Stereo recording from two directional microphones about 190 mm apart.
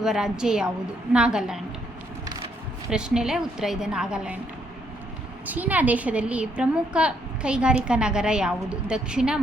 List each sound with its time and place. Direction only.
0.0 s a woman's voice: 5° right (ahead or behind)
2.9 s a woman's voice: 5° right (ahead or behind)
5.5 s a woman's voice: 10° right (ahead or behind)